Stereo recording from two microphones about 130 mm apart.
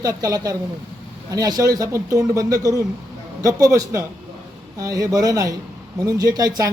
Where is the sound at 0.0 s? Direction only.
30° right (ahead or behind).